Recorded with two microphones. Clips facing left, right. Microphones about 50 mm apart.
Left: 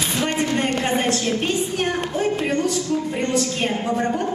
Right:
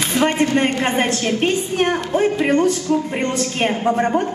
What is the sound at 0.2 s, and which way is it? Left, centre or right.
A woman's voice, right.